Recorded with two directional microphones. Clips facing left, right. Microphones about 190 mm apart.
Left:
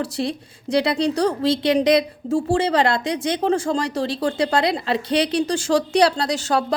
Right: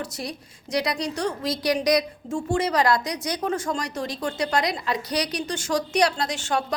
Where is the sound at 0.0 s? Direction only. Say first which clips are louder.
Left 8 dB; 30° left (ahead or behind).